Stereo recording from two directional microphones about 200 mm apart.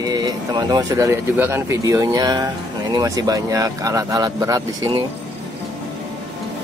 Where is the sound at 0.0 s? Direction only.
20° right (ahead or behind).